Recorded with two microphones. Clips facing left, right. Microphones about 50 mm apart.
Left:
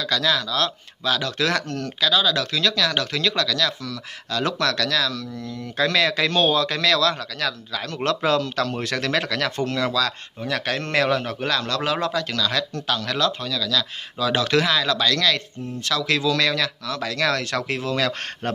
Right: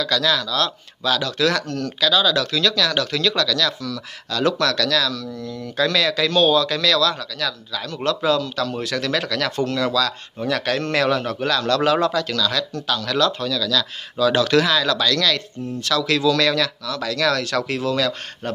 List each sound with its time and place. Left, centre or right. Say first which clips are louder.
0.0 s speech: right 2 dB; centre
2.0 s speech: right 2 dB; centre
10.5 s speech: right 2 dB; centre
11.7 s speech: right 5 dB; centre
12.4 s speech: right 1 dB; left
16.8 s speech: right 2 dB; left